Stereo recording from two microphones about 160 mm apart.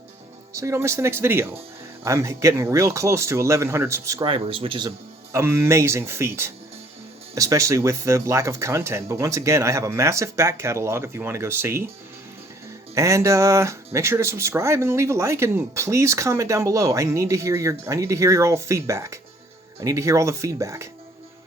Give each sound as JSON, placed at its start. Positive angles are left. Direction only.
{"t": 0.5, "sound": "speech", "side_deg": -20}
{"t": 5.3, "sound": "speech", "side_deg": -15}
{"t": 12.9, "sound": "speech", "side_deg": -20}